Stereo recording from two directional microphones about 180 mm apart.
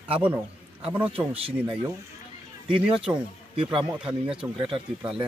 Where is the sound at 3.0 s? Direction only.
5° right (ahead or behind).